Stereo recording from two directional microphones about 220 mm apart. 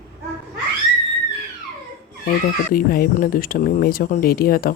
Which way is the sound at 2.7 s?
40° left (ahead or behind).